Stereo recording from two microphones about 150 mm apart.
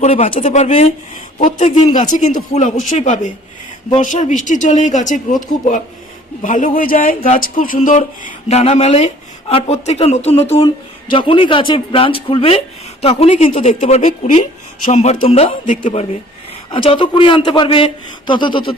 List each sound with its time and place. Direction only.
0.0 s speech: 50° left (ahead or behind)
16.7 s speech: 35° left (ahead or behind)